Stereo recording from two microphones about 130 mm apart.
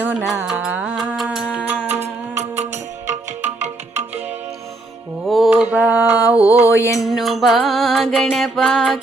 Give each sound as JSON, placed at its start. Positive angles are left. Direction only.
{"t": 0.0, "sound": "music", "side_deg": -10}
{"t": 1.9, "sound": "music", "side_deg": -60}
{"t": 5.2, "sound": "mantra", "side_deg": 0}
{"t": 6.6, "sound": "mantra", "side_deg": 20}
{"t": 7.0, "sound": "music", "side_deg": 0}